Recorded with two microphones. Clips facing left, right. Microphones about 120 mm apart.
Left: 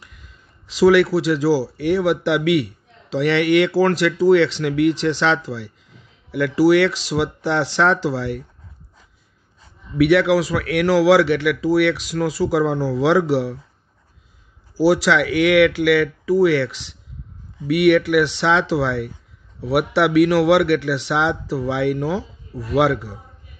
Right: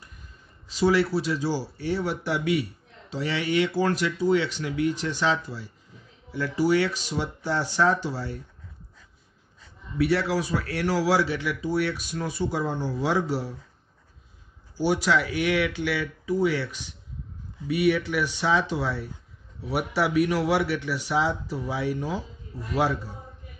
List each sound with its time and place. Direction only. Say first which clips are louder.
0.0 s speech: left 2 dB; 90° left
9.9 s a man's voice: left 9 dB; 90° left
14.8 s a man's voice: left 8 dB; 90° left